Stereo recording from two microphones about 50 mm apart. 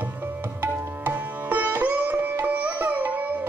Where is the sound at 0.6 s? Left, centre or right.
Right.